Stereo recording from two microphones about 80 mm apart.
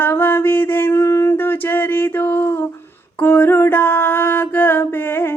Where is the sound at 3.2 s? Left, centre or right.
Left.